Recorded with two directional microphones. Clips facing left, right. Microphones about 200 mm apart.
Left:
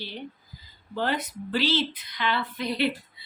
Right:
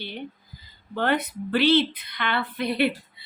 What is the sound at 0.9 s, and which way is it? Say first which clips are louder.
A woman's voice: right 4 dB; 60° right (ahead or behind).